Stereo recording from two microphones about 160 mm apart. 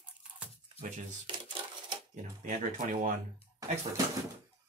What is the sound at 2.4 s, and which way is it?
Speech, 55° right (ahead or behind).